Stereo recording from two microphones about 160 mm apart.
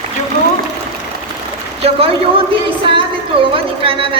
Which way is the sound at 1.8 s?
35° right (ahead or behind).